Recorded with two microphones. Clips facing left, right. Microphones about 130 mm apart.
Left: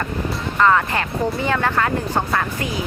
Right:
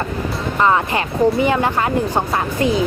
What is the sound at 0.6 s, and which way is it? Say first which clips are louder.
A woman's voice: even; 20° right (ahead or behind).